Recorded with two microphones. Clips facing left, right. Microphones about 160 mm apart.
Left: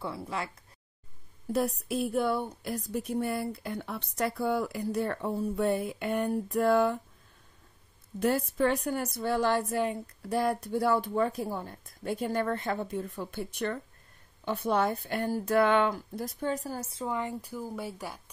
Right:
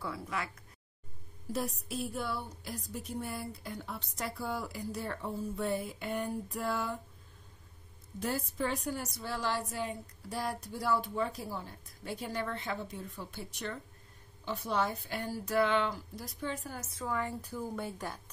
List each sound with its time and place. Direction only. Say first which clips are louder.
0.0 s speech: left 3 dB; 30° left (ahead or behind)
1.5 s a woman's voice: left 7 dB; 60° left (ahead or behind)
8.2 s a woman's voice: left 8 dB; 60° left (ahead or behind); by 18.2 s 10° left (ahead or behind)